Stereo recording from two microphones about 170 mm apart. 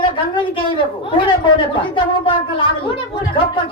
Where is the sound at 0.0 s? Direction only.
30° left (ahead or behind).